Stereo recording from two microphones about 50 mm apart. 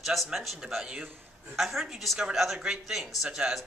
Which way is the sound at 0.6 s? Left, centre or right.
Centre.